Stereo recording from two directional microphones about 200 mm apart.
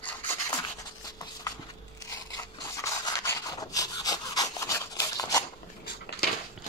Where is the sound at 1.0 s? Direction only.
20° left (ahead or behind).